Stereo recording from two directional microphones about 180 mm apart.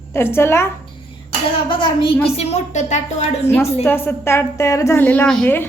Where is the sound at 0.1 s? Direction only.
15° left (ahead or behind).